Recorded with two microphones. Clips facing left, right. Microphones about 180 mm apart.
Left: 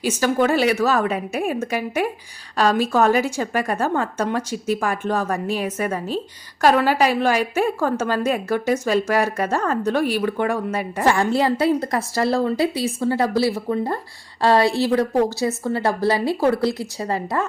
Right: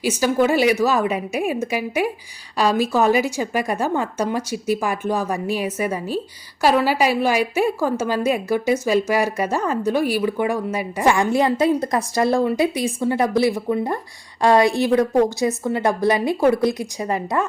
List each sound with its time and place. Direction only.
0.0 s a woman's voice: 10° right (ahead or behind)